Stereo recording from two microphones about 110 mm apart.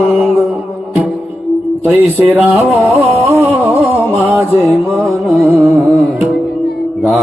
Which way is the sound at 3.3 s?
15° right (ahead or behind).